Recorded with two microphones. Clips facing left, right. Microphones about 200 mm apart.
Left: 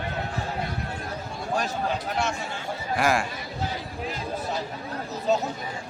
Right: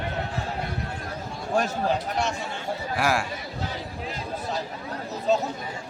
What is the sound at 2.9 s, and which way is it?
Speech, 5° right (ahead or behind).